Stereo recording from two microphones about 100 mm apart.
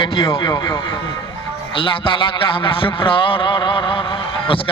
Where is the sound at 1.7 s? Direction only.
60° left (ahead or behind).